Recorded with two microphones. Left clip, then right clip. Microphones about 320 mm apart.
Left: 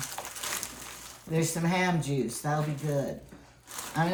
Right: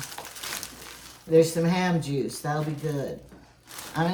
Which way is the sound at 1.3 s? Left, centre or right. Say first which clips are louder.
Right 9 dB; centre.